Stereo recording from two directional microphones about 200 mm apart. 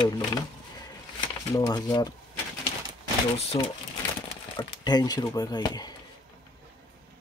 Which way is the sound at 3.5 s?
25° left (ahead or behind).